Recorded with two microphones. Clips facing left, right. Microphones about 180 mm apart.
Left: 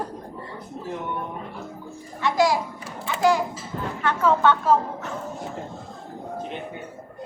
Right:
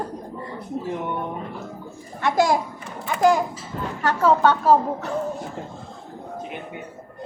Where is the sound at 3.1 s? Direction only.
45° right (ahead or behind).